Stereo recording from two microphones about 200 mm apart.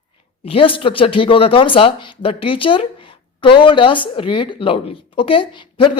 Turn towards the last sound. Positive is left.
turn(degrees=25)  # may be behind; listen again after turning